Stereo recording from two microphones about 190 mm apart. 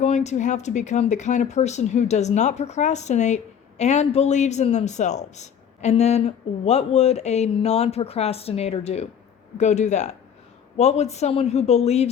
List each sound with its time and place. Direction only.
0.0 s speech: 35° left (ahead or behind)